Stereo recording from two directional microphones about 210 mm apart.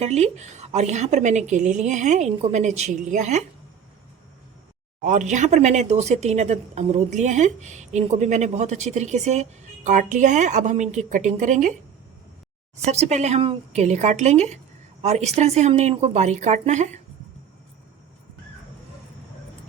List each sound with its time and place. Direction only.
0.0 s speech: 30° right (ahead or behind)
5.0 s speech: 35° right (ahead or behind)
12.8 s speech: 30° right (ahead or behind)